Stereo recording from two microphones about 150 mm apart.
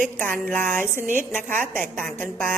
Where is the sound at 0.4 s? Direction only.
15° left (ahead or behind).